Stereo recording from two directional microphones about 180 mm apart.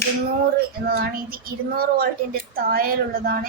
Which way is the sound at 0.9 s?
60° right (ahead or behind).